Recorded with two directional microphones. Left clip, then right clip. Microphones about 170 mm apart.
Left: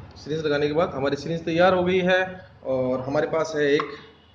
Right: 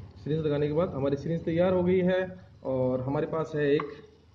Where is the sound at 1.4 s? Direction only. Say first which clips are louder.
Left 7 dB; 10° right (ahead or behind).